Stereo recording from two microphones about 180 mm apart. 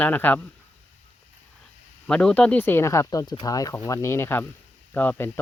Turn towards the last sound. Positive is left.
turn(degrees=10)  # may be behind; listen again after turning